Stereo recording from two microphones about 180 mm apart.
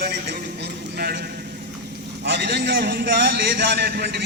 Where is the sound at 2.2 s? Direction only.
65° right (ahead or behind).